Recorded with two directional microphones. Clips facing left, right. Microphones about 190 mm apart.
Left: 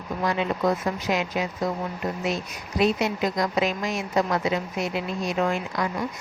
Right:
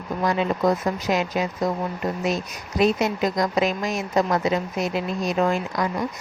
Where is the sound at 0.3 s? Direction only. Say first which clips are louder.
Right 3 dB; 40° right (ahead or behind).